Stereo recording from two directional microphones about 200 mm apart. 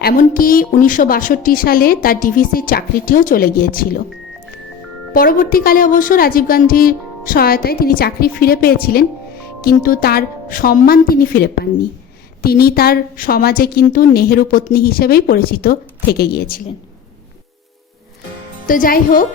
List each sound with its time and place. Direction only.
0.0 s a woman's voice: 45° left (ahead or behind)
5.1 s a woman's voice: 45° left (ahead or behind)
18.7 s a woman's voice: 45° left (ahead or behind)